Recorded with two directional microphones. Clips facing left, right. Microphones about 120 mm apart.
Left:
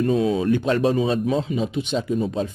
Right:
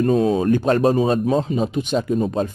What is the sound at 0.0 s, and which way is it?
Speech, 40° right (ahead or behind).